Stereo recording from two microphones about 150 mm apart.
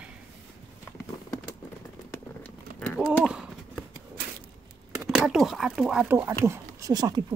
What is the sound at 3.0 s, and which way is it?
Horse, 5° right (ahead or behind).